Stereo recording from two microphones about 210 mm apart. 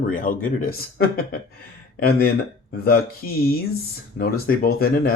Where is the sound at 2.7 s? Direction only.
45° left (ahead or behind).